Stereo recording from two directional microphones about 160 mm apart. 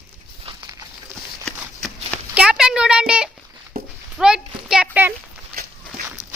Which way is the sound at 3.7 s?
70° right (ahead or behind).